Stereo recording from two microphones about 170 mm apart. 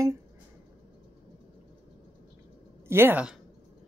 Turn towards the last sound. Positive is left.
turn(degrees=-5)  # may be behind; listen again after turning